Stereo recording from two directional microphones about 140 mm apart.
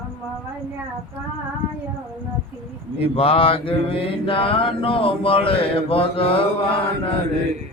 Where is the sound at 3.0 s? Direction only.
40° left (ahead or behind).